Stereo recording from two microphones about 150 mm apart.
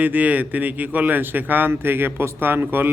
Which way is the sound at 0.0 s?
10° right (ahead or behind).